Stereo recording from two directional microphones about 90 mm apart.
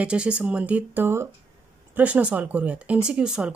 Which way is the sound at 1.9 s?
15° right (ahead or behind).